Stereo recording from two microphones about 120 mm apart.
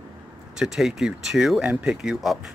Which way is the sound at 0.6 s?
5° right (ahead or behind).